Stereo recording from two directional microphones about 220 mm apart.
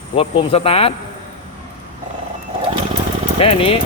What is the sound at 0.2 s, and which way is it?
Speech, 25° left (ahead or behind).